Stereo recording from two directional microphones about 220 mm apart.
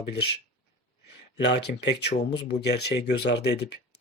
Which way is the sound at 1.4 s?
50° left (ahead or behind).